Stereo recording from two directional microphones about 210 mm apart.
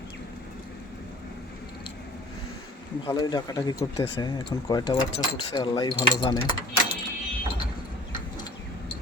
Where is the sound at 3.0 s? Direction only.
20° left (ahead or behind).